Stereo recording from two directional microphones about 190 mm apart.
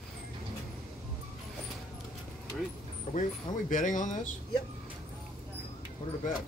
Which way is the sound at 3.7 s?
45° left (ahead or behind).